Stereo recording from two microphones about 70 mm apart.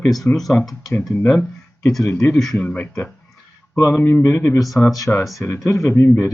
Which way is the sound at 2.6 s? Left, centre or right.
Centre.